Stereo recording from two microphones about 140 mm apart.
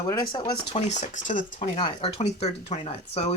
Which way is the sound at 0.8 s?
55° left (ahead or behind).